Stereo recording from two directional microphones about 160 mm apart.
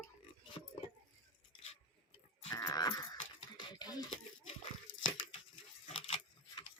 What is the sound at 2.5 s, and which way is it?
Dog, 15° left (ahead or behind).